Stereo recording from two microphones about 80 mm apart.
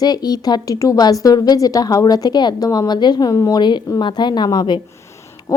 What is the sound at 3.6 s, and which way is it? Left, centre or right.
Speech, left.